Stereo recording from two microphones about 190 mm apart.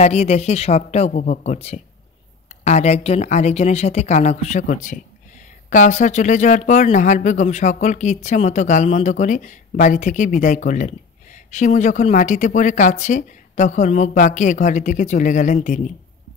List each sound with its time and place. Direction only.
0.0 s speech: 35° left (ahead or behind)